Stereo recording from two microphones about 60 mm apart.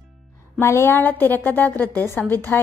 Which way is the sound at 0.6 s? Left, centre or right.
Left.